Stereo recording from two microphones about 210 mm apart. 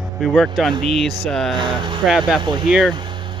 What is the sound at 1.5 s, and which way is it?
Speech, 20° right (ahead or behind).